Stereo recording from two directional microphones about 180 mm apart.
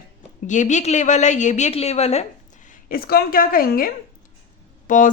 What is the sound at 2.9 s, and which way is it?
A woman's voice, 60° left (ahead or behind).